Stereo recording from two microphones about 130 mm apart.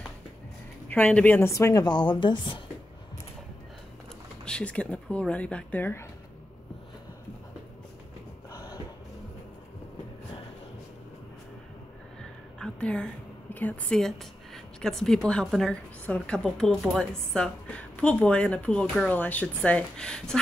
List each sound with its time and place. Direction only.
0.8 s speech: 10° left (ahead or behind); by 2.6 s 40° left (ahead or behind)
4.5 s speech: 10° left (ahead or behind)
8.5 s a sound: 25° left (ahead or behind)
12.2 s a woman's voice: 5° left (ahead or behind)